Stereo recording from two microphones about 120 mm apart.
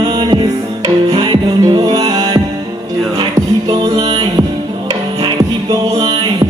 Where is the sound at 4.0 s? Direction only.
35° right (ahead or behind).